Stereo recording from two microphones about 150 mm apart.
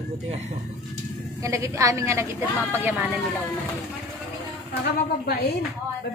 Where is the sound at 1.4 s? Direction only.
20° right (ahead or behind).